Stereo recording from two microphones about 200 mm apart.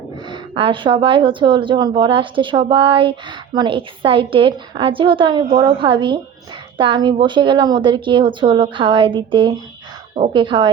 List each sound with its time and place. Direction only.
0.3 s speech: 25° right (ahead or behind)